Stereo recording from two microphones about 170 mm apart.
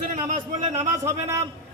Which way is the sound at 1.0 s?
15° right (ahead or behind).